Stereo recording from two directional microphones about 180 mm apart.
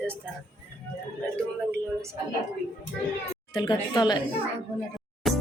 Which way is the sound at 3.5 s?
25° left (ahead or behind).